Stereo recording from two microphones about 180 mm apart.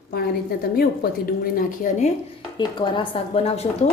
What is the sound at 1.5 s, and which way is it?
Speech, 45° left (ahead or behind).